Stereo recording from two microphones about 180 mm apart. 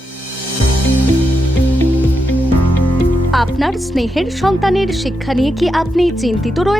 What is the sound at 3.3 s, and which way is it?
Speech, centre (ahead or behind).